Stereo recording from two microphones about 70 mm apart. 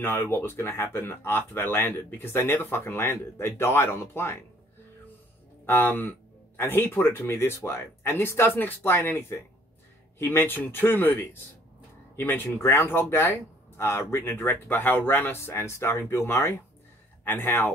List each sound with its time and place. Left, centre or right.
0.0 s speech: left
5.7 s speech: left